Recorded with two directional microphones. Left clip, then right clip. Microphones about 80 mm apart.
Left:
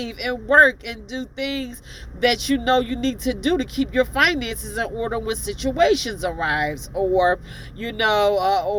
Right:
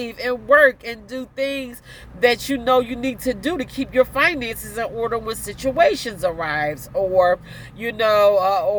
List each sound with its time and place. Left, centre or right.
0.0 s speech: right